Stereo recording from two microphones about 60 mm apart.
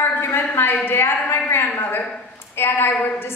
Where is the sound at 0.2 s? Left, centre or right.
Left.